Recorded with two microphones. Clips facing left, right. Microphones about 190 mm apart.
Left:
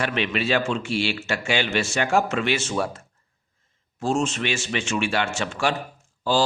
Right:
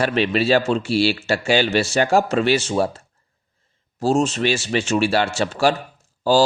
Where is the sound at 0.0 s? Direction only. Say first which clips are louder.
Right 6 dB; 35° right (ahead or behind).